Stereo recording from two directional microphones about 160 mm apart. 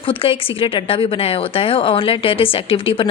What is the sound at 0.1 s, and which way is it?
Speech, 35° left (ahead or behind).